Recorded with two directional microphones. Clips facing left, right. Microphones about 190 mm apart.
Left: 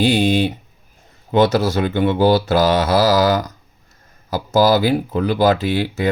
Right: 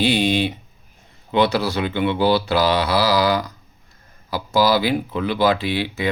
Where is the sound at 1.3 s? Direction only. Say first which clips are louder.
Left 4 dB; 45° left (ahead or behind).